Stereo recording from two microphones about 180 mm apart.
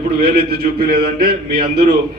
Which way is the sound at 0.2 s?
60° right (ahead or behind).